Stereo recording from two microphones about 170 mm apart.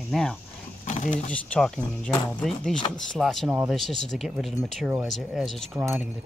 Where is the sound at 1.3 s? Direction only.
5° left (ahead or behind).